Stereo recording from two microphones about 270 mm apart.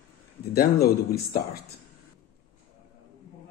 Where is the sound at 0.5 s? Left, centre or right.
Left.